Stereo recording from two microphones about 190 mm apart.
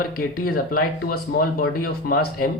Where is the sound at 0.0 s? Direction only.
50° left (ahead or behind).